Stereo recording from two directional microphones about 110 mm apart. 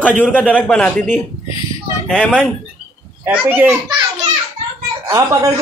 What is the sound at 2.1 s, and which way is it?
Speech, 10° left (ahead or behind).